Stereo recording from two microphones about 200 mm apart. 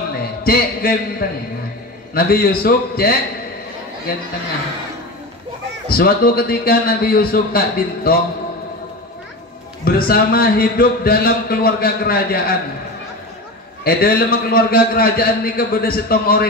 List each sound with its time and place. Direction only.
0.4 s a man's voice: 50° left (ahead or behind)
5.9 s a man's voice: 50° left (ahead or behind)
9.8 s a man's voice: 50° left (ahead or behind)
13.8 s a man's voice: 50° left (ahead or behind)